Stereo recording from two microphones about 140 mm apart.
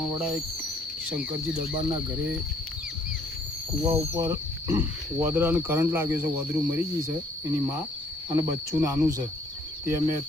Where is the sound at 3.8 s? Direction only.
25° right (ahead or behind).